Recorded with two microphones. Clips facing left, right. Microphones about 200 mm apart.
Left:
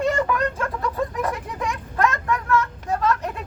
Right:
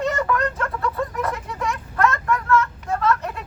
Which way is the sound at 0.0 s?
10° left (ahead or behind).